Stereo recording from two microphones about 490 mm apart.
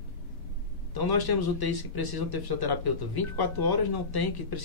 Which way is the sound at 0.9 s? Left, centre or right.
Left.